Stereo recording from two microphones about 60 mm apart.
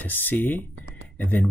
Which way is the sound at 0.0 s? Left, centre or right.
Left.